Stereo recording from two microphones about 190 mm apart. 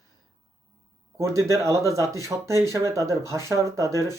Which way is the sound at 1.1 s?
15° right (ahead or behind).